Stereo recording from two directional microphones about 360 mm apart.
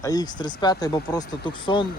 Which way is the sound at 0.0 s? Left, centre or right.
Centre.